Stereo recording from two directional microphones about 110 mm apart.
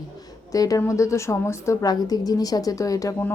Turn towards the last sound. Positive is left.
turn(degrees=30)  # may be behind; listen again after turning